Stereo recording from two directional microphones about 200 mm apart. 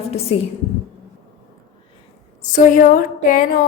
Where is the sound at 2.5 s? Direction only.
40° left (ahead or behind).